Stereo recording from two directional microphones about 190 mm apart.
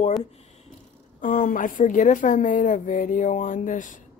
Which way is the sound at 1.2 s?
40° left (ahead or behind).